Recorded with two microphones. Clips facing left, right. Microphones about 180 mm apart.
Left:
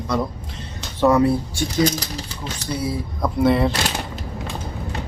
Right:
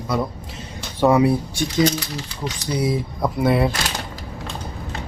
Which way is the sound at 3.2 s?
5° right (ahead or behind).